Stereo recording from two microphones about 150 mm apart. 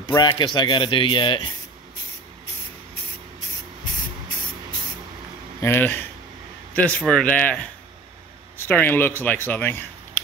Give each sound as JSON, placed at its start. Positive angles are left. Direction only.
{"t": 0.1, "sound": "speech", "side_deg": 20}
{"t": 0.4, "sound": "speech", "side_deg": 30}
{"t": 5.6, "sound": "speech", "side_deg": 15}